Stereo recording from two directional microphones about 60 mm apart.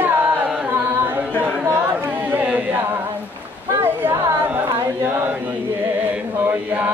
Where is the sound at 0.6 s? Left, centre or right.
Right.